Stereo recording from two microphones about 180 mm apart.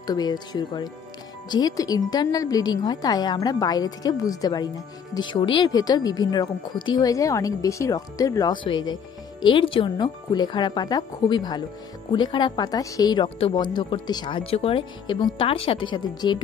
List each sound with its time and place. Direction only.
0.0 s speech: 20° left (ahead or behind)